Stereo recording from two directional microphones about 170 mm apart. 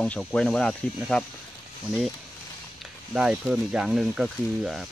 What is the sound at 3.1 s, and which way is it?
Speech, 5° right (ahead or behind).